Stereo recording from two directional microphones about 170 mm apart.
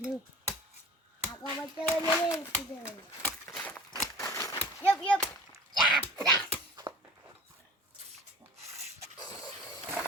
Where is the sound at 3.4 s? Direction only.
10° left (ahead or behind).